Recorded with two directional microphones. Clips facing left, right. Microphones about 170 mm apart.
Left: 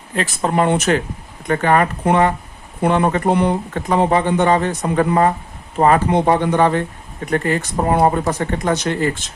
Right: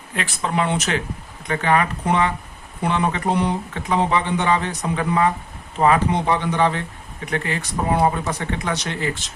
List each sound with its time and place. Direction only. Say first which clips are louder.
0.2 s speech: left 5 dB; 45° left (ahead or behind)